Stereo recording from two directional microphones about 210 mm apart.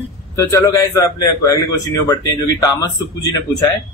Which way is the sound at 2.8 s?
15° left (ahead or behind).